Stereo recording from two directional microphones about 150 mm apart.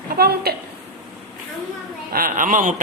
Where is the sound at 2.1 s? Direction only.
70° right (ahead or behind).